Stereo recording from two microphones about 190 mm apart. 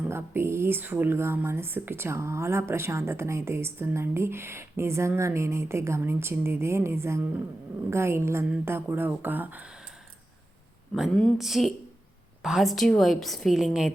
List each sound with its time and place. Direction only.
0.1 s speech: 15° right (ahead or behind)
10.9 s a woman's voice: centre (ahead or behind)